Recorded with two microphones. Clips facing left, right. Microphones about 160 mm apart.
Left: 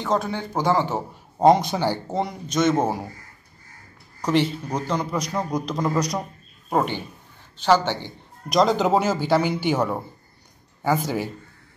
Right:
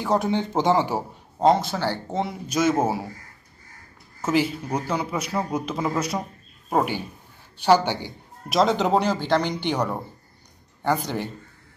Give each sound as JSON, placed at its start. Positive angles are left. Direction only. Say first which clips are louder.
{"t": 0.0, "sound": "speech", "louder": "right 2 dB", "side_deg": -15}
{"t": 1.4, "sound": "speech", "louder": "left 3 dB", "side_deg": 15}
{"t": 2.0, "sound": "a man's voice", "louder": "left 1 dB", "side_deg": 0}
{"t": 4.2, "sound": "a man's voice", "louder": "left 1 dB", "side_deg": -5}